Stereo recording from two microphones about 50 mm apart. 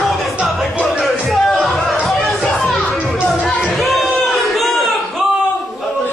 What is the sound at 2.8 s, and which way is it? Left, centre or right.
Music, left.